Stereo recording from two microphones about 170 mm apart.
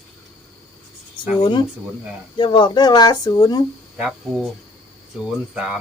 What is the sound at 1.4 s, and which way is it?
Speech, 25° left (ahead or behind).